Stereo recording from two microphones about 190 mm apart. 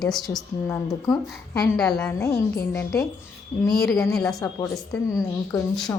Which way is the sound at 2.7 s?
15° left (ahead or behind).